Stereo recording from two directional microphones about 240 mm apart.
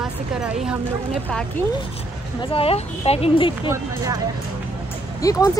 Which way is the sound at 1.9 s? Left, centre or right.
Left.